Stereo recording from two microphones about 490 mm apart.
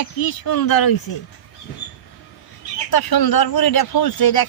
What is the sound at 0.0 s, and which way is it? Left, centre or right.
Speech, left.